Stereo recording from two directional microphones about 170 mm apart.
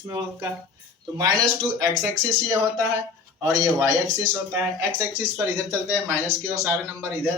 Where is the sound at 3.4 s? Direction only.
20° right (ahead or behind).